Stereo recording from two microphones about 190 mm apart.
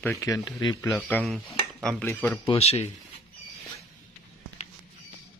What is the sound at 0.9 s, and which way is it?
Speech, 5° left (ahead or behind).